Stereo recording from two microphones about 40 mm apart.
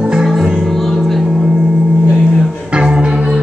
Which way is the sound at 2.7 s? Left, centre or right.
Right.